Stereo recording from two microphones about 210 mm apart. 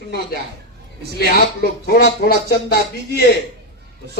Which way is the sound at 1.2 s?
45° left (ahead or behind).